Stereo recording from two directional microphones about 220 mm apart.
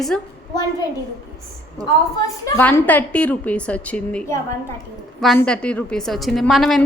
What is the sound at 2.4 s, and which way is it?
A woman's voice, 10° left (ahead or behind).